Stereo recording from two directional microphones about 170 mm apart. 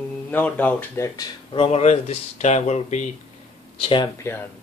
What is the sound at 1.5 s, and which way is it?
Speech, 35° left (ahead or behind).